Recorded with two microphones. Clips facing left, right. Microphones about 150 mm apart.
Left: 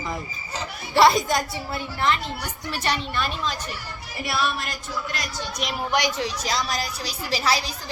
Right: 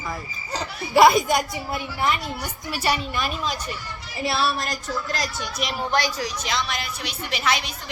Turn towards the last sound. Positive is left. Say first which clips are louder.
# left 1 dB
turn(degrees=35)  # may be behind; listen again after turning